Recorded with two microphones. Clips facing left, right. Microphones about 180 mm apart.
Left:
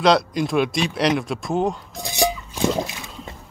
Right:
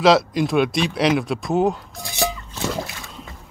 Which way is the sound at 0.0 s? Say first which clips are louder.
Right 2 dB; centre (ahead or behind).